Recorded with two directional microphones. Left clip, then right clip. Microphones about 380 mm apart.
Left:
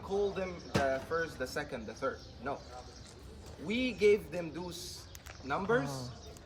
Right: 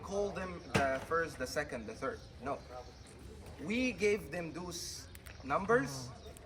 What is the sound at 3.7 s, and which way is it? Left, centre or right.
Speech, centre.